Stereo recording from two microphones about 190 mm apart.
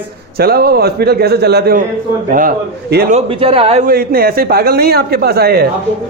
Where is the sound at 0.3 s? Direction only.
55° right (ahead or behind).